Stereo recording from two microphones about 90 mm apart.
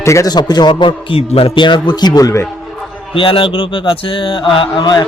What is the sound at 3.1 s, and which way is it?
Speech, 75° left (ahead or behind).